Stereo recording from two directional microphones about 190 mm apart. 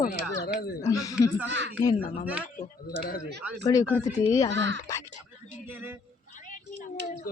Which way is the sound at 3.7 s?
20° left (ahead or behind).